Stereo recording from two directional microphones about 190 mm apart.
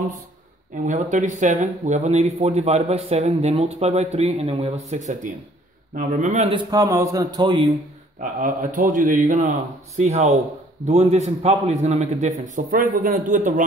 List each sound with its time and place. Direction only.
0.8 s speech: 40° right (ahead or behind)
6.5 s a man's voice: 20° right (ahead or behind)
8.2 s a man's voice: 45° right (ahead or behind)